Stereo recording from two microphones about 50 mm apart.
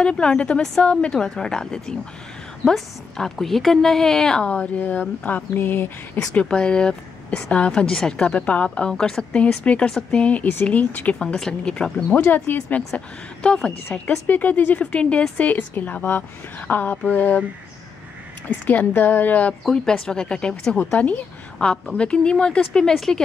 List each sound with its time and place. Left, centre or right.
0.0 s speech: centre
1.2 s a woman's voice: centre
4.5 s a woman's voice: left
6.3 s speech: centre
8.9 s a woman's voice: centre
9.6 s a woman's voice: left
11.3 s a woman's voice: centre
12.2 s speech: left
12.6 s speech: left
14.1 s a woman's voice: left
14.8 s speech: left
15.3 s a woman's voice: left
18.7 s a woman's voice: left
19.7 s a woman's voice: centre